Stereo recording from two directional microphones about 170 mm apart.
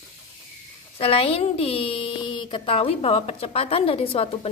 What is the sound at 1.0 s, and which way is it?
Speech, 35° left (ahead or behind).